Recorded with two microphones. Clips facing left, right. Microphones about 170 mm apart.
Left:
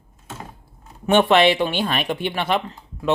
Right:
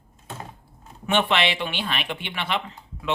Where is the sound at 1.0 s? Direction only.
45° left (ahead or behind).